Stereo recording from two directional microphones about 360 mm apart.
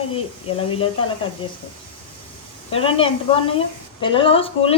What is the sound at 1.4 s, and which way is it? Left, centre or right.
Speech, centre.